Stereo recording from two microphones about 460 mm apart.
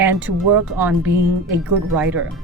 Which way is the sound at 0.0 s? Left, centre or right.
Centre.